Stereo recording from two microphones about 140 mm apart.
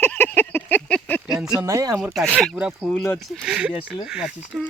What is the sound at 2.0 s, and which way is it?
Speech, centre (ahead or behind).